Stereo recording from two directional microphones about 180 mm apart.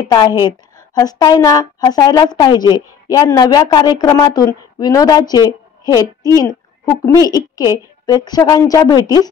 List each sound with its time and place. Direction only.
0.0 s a woman's voice: 20° left (ahead or behind)
7.1 s a woman's voice: 20° left (ahead or behind)